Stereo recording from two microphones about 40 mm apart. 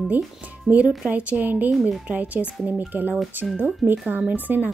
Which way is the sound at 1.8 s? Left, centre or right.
Centre.